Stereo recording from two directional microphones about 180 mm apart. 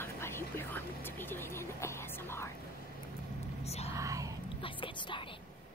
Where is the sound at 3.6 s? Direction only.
35° left (ahead or behind).